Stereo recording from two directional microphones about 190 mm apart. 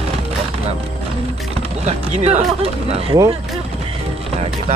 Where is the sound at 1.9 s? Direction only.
35° right (ahead or behind).